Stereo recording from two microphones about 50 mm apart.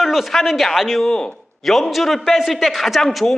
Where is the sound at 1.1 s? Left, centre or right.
Centre.